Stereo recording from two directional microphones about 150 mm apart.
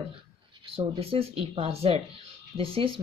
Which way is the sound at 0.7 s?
40° right (ahead or behind).